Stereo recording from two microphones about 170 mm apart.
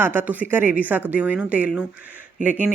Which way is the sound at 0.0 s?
10° right (ahead or behind).